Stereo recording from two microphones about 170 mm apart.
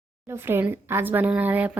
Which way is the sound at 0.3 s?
15° right (ahead or behind).